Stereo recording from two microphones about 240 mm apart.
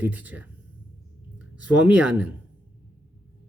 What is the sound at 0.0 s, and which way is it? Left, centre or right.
Speech, centre.